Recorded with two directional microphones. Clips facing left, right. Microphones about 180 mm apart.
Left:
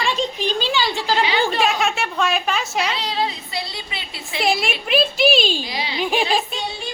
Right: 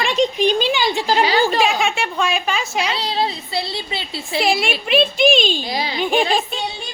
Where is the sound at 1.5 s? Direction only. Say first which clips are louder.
Right 2 dB; centre (ahead or behind).